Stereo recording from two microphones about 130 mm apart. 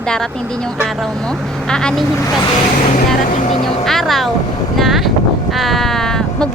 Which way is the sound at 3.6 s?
Centre (ahead or behind).